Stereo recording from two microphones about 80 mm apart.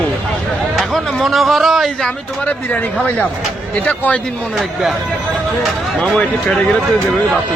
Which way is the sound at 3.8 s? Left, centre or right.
Centre.